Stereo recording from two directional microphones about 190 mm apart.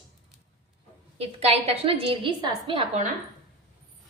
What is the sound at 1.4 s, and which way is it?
A woman's voice, 30° right (ahead or behind).